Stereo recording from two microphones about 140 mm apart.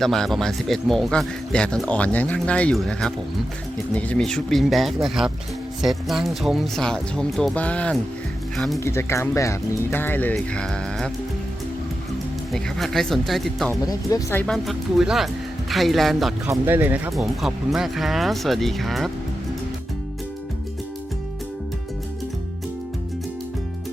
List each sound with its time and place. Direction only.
0.0 s speech: 5° left (ahead or behind)
8.8 s speech: 20° left (ahead or behind)
12.5 s speech: centre (ahead or behind)
13.8 s speech: 25° left (ahead or behind)
14.4 s speech: centre (ahead or behind)
16.5 s speech: 15° right (ahead or behind)
17.2 s speech: centre (ahead or behind)